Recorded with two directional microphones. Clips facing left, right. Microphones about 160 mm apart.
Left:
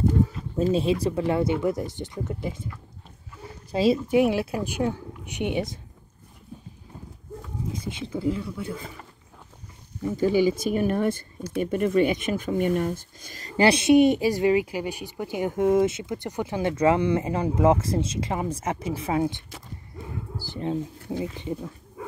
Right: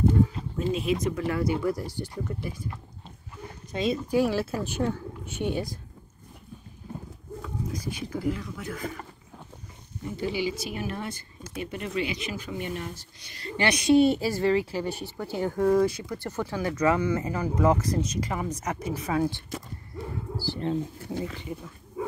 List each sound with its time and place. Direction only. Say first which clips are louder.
0.6 s speech: left 4 dB; 30° left (ahead or behind)
3.7 s speech: left 5 dB; 30° left (ahead or behind)
4.2 s speech: left 3 dB; 15° left (ahead or behind)
7.7 s speech: left 3 dB; 25° left (ahead or behind)
10.1 s speech: left 8 dB; 45° left (ahead or behind)
13.6 s speech: left 3 dB; 25° left (ahead or behind)